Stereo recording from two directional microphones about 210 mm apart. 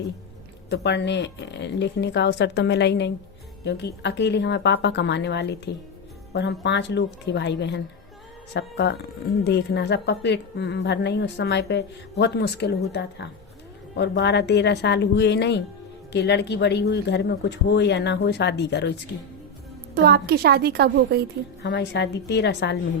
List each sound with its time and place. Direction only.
0.7 s speech: 55° left (ahead or behind)
19.9 s a woman's voice: 45° right (ahead or behind)
21.6 s speech: 55° left (ahead or behind)